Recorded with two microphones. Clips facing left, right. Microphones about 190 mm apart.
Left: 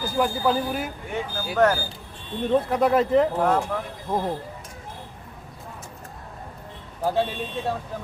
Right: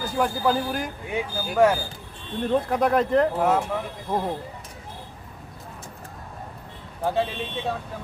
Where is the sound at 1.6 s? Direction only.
10° right (ahead or behind).